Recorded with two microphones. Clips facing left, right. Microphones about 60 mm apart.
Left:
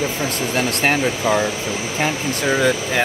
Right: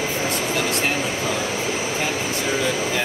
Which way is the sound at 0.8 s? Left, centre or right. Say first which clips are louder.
Left 4 dB; left.